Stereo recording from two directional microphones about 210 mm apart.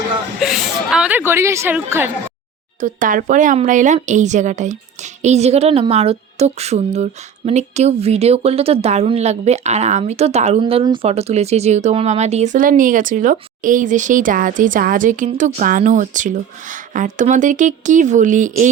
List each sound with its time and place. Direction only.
0.3 s a woman's voice: centre (ahead or behind)
2.8 s a woman's voice: 40° right (ahead or behind)